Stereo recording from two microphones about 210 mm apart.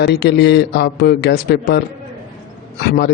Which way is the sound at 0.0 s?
50° left (ahead or behind).